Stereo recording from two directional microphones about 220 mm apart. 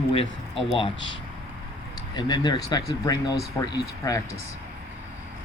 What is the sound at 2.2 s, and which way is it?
Speech, 20° left (ahead or behind).